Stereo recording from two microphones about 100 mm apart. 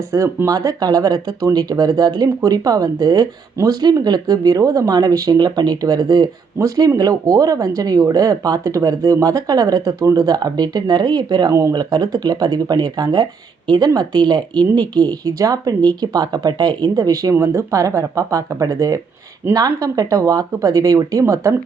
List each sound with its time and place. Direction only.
0.1 s speech: 30° right (ahead or behind)
17.3 s speech: 30° right (ahead or behind)